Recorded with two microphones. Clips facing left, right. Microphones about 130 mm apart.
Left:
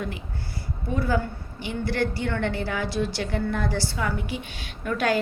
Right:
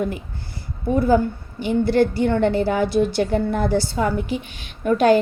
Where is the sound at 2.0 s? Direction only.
30° right (ahead or behind).